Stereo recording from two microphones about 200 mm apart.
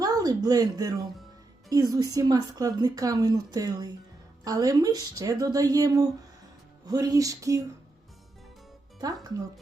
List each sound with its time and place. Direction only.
0.0 s a woman's voice: 20° right (ahead or behind)